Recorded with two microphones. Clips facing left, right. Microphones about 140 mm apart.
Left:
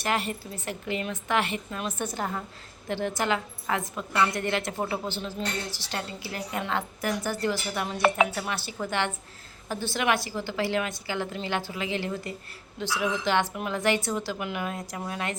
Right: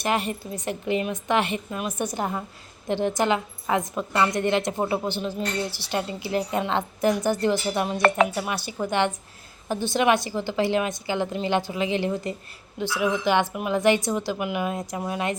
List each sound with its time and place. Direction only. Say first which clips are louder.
0.0 s a woman's voice: right 3 dB; 20° right (ahead or behind)